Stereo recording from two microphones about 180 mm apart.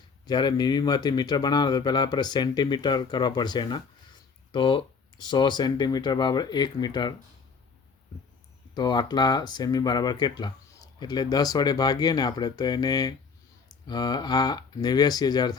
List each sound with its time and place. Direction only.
0.3 s speech: 25° left (ahead or behind)
8.7 s speech: 25° left (ahead or behind)